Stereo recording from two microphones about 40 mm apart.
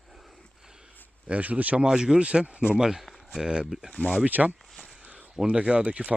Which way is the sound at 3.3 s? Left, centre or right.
Right.